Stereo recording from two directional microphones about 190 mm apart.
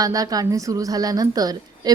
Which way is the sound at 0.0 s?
20° right (ahead or behind).